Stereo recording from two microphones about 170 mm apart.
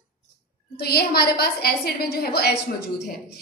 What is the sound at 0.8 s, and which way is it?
A woman's voice, 65° left (ahead or behind).